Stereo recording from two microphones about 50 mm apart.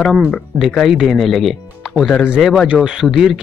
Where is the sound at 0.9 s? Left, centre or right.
Centre.